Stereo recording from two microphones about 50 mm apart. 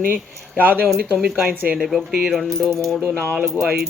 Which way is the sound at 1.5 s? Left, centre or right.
Right.